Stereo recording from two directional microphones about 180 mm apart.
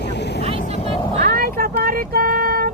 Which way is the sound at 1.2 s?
50° right (ahead or behind).